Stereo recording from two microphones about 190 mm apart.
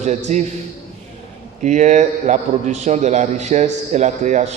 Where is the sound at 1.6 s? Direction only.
40° right (ahead or behind).